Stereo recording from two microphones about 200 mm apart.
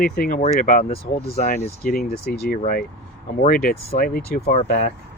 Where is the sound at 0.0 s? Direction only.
45° left (ahead or behind).